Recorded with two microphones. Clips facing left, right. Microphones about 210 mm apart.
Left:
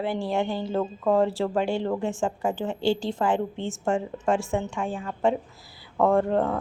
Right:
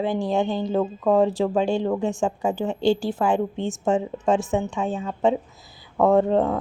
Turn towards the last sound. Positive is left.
turn(degrees=-10)  # may be behind; listen again after turning